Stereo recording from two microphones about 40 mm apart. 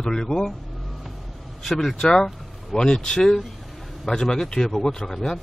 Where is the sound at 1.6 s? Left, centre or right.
Centre.